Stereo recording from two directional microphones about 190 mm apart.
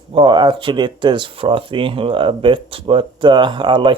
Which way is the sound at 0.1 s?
25° right (ahead or behind).